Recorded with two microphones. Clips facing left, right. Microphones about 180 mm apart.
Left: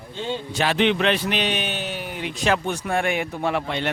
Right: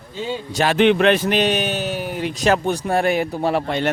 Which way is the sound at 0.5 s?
45° right (ahead or behind).